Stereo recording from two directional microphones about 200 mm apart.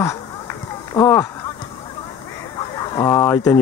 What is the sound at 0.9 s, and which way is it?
Speech, 15° left (ahead or behind).